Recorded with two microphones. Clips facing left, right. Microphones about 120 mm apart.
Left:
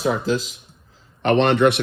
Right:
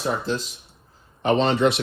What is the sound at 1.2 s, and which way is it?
Speech, 65° left (ahead or behind).